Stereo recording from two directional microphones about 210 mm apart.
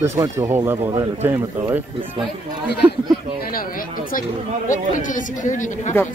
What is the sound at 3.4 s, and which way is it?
Speech, 45° left (ahead or behind).